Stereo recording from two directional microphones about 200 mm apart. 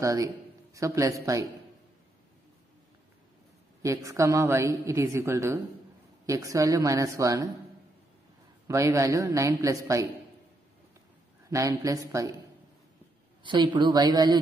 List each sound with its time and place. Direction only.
0.0 s a woman's voice: 15° right (ahead or behind)
3.8 s a woman's voice: 15° right (ahead or behind)
8.6 s a woman's voice: 15° right (ahead or behind)
11.4 s a woman's voice: 15° right (ahead or behind)
13.4 s a woman's voice: 25° right (ahead or behind)